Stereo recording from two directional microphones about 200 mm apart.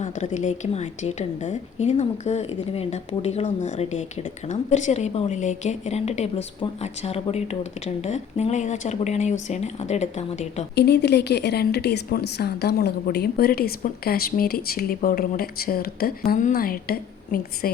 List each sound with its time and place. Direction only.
0.0 s a woman's voice: 35° left (ahead or behind)
10.8 s a woman's voice: 55° left (ahead or behind)